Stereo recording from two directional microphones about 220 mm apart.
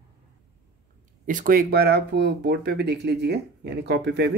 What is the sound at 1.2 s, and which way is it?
Speech, 40° right (ahead or behind).